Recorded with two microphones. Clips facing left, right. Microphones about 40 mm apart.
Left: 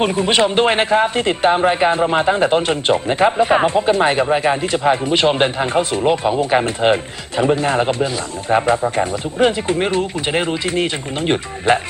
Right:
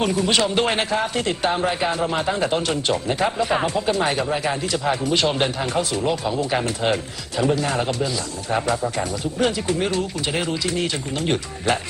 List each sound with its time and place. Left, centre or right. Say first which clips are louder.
0.0 s a man's voice: left 4 dB; left